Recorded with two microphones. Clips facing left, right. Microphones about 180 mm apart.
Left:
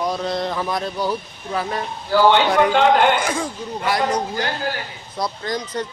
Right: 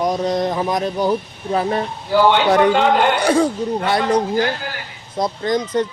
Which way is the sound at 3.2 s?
35° right (ahead or behind).